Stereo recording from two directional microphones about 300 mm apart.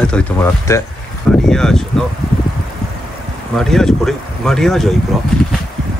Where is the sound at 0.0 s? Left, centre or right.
Centre.